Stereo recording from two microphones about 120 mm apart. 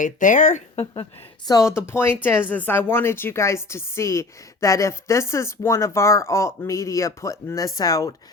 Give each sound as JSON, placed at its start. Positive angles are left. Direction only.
{"t": 0.0, "sound": "speech", "side_deg": 90}
{"t": 1.5, "sound": "a woman's voice", "side_deg": 25}